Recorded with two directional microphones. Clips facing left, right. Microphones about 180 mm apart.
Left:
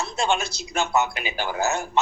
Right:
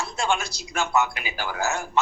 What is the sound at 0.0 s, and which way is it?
A man's voice, 20° left (ahead or behind).